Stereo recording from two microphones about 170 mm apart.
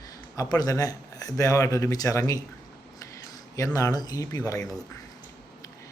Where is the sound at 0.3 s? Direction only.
20° left (ahead or behind).